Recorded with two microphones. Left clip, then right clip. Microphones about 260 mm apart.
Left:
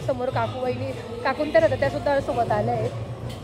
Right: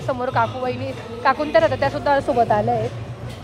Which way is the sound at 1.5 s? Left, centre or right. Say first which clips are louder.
Even; centre.